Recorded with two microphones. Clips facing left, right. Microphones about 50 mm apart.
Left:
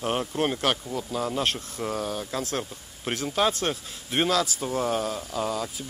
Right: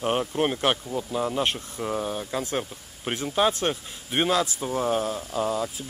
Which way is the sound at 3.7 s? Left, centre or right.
Centre.